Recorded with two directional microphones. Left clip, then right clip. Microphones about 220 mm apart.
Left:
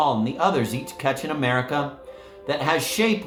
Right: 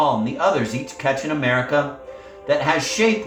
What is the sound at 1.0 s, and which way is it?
Speech, 60° left (ahead or behind).